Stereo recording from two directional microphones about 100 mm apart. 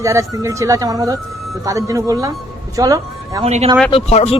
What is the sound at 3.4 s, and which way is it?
Speech, 90° right.